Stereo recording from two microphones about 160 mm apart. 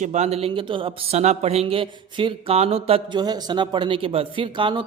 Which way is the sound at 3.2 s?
25° right (ahead or behind).